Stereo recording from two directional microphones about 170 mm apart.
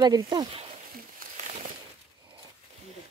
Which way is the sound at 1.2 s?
50° right (ahead or behind).